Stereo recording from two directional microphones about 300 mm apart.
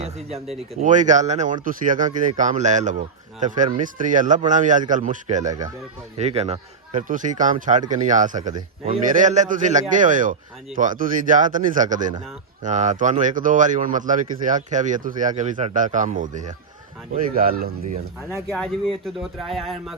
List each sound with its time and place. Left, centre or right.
0.0 s a sound: right
0.7 s speech: right
19.0 s speech: centre